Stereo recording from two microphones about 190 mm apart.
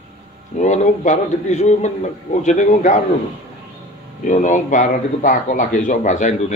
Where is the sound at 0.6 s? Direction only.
40° left (ahead or behind).